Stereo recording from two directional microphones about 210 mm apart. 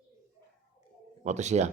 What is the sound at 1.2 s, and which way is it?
Speech, 35° right (ahead or behind).